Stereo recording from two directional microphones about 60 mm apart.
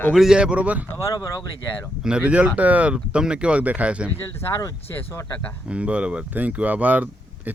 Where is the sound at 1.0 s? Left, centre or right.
Left.